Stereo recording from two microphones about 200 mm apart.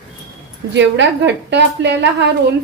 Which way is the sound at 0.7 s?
60° right (ahead or behind).